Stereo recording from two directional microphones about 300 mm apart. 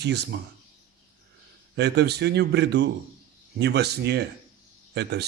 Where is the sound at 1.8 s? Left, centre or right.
Right.